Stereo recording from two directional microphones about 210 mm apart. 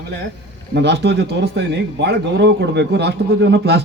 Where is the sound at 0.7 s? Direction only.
55° right (ahead or behind).